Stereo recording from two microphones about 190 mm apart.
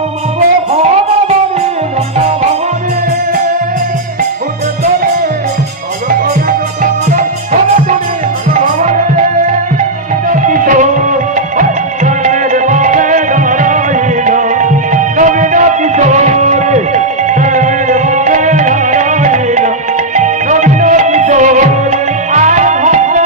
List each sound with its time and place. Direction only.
6.8 s music: 45° right (ahead or behind)
8.5 s music: 40° right (ahead or behind)
10.3 s music: 45° right (ahead or behind)